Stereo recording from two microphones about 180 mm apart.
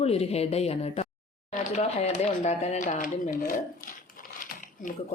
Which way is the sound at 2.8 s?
50° left (ahead or behind).